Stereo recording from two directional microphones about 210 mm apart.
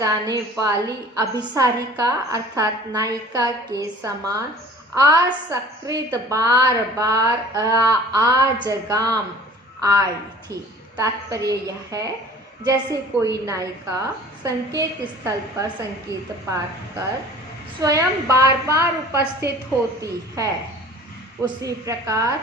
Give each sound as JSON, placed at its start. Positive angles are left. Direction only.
{"t": 0.0, "sound": "a woman's voice", "side_deg": -15}
{"t": 17.8, "sound": "a woman's voice", "side_deg": -15}